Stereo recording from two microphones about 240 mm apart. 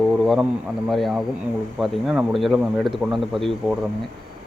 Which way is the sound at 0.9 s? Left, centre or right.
Centre.